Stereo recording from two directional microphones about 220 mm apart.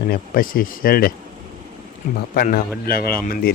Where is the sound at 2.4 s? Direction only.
45° left (ahead or behind).